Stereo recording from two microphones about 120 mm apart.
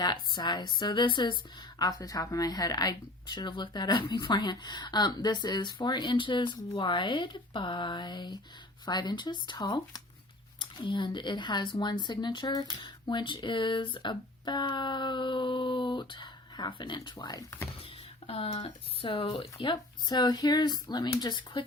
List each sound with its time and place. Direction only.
0.0 s speech: 35° left (ahead or behind)
18.3 s speech: 55° left (ahead or behind); by 21.6 s 40° left (ahead or behind)